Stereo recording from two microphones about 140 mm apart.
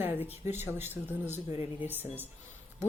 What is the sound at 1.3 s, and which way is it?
Speech, 50° left (ahead or behind).